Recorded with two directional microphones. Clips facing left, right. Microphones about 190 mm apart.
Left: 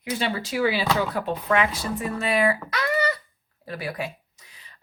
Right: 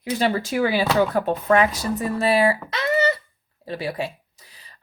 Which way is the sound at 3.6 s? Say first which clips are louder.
Right 4 dB; 25° right (ahead or behind).